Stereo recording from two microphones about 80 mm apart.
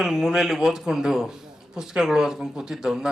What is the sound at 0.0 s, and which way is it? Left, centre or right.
Speech, centre.